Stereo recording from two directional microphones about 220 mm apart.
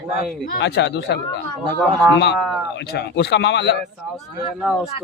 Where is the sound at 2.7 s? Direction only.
45° left (ahead or behind).